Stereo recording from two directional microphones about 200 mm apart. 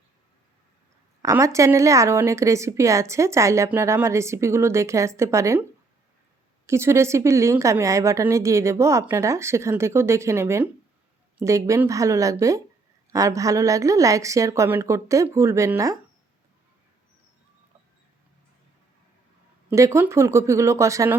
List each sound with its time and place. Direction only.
1.2 s a woman's voice: 15° right (ahead or behind)
6.7 s a woman's voice: 15° right (ahead or behind)
19.7 s a woman's voice: 15° right (ahead or behind)